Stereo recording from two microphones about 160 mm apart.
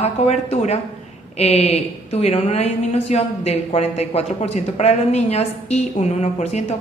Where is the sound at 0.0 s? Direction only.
40° left (ahead or behind).